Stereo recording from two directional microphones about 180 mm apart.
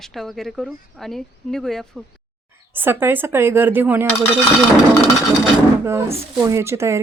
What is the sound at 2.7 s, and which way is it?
Speech, 10° right (ahead or behind).